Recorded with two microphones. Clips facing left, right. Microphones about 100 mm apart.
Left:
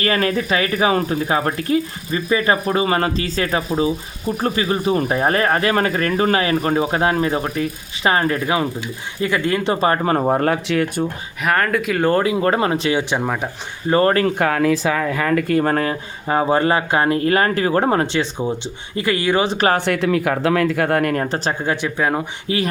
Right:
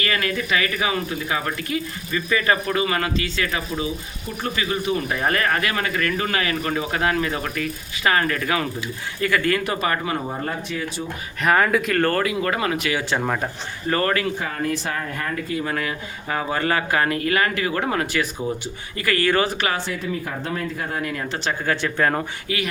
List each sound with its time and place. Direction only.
0.0 s speech: 35° left (ahead or behind)
10.2 s speech: 70° left (ahead or behind)
11.4 s speech: 5° right (ahead or behind)
12.0 s speech: 25° left (ahead or behind)
13.2 s speech: 5° left (ahead or behind)
13.8 s speech: 25° left (ahead or behind)
14.3 s speech: 75° left (ahead or behind)
15.2 s speech: 90° left; by 19.5 s 15° left (ahead or behind)
19.7 s speech: 65° left (ahead or behind); by 21.5 s 40° left (ahead or behind)
21.6 s speech: 15° left (ahead or behind)
22.4 s speech: 35° left (ahead or behind)